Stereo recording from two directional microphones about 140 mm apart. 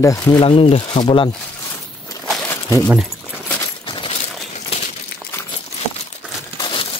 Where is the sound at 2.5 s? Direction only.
20° left (ahead or behind).